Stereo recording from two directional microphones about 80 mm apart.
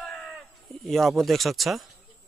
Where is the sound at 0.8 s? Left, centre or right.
Centre.